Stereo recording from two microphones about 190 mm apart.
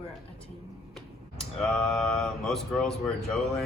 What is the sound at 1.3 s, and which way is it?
Speech, centre (ahead or behind).